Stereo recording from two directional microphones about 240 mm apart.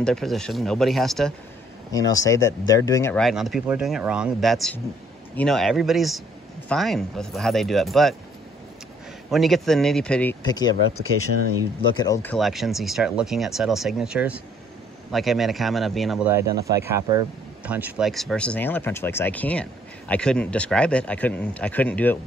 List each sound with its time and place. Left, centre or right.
0.0 s a man's voice: centre
1.9 s a man's voice: centre
9.3 s a man's voice: centre
10.4 s speech: centre
12.0 s a man's voice: centre